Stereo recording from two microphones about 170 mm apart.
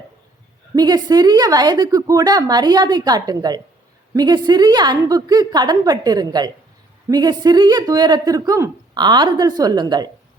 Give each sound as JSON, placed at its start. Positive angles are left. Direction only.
{"t": 0.8, "sound": "speech", "side_deg": -25}